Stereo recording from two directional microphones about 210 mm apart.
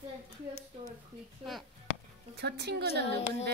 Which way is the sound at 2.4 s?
50° right (ahead or behind).